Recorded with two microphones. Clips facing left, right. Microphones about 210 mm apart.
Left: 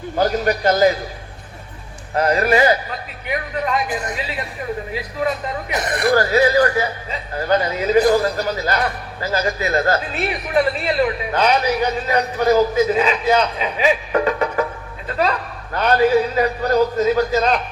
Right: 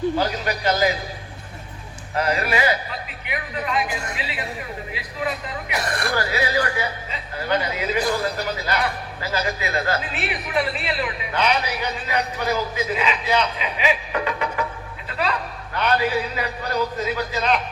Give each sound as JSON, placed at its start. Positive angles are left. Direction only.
{"t": 0.2, "sound": "speech", "side_deg": 50}
{"t": 2.1, "sound": "speech", "side_deg": 40}
{"t": 5.8, "sound": "speech", "side_deg": 20}
{"t": 6.1, "sound": "speech", "side_deg": 40}